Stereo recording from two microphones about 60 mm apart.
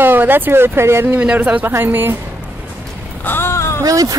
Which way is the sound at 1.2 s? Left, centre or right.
Right.